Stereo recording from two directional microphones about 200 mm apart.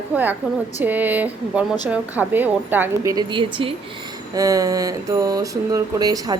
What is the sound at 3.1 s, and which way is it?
Speech, 25° right (ahead or behind).